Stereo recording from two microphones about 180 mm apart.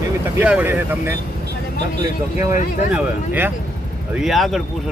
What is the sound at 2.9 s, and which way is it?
Speech, 10° right (ahead or behind).